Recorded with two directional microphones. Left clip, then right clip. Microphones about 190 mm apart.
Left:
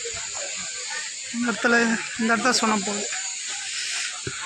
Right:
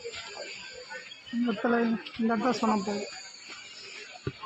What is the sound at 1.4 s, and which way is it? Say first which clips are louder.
Speech: left 8 dB; 15° left (ahead or behind).